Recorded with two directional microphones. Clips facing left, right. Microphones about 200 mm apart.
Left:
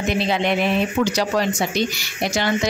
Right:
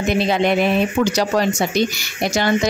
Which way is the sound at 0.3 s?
45° right (ahead or behind).